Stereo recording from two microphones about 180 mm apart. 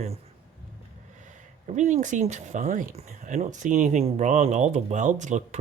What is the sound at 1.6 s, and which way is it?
Speech, 40° right (ahead or behind).